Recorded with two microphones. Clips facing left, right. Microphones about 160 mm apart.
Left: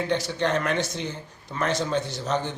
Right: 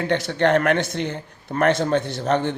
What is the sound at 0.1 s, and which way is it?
Speech, 60° right (ahead or behind).